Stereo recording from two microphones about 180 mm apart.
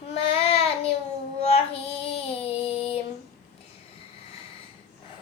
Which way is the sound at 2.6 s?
30° left (ahead or behind).